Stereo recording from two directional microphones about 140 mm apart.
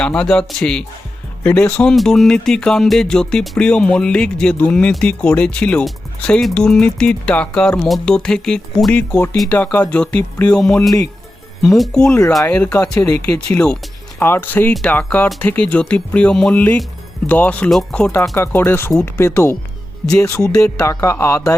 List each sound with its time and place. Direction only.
0.0 s speech: 5° left (ahead or behind)